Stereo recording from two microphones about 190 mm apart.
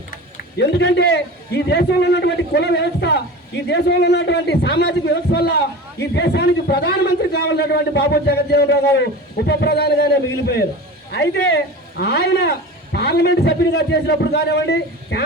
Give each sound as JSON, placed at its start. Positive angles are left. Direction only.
{"t": 0.8, "sound": "a man's voice", "side_deg": 65}